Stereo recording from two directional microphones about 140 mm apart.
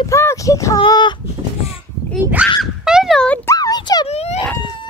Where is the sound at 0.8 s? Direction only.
35° left (ahead or behind).